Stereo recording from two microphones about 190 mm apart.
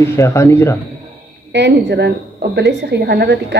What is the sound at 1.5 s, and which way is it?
A woman's voice, 65° right (ahead or behind).